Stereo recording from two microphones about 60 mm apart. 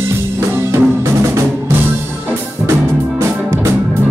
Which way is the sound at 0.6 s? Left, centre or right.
Right.